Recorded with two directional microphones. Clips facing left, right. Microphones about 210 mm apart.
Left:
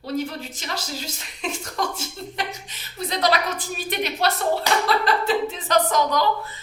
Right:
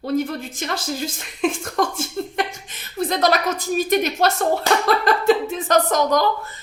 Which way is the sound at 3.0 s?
50° right (ahead or behind).